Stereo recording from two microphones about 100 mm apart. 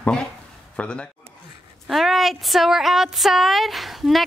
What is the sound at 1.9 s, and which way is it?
Speech, centre (ahead or behind).